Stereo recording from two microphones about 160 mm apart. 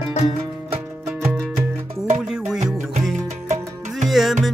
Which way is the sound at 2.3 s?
5° right (ahead or behind).